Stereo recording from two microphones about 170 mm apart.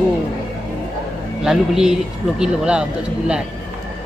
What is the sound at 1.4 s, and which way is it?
A man's voice, 5° right (ahead or behind).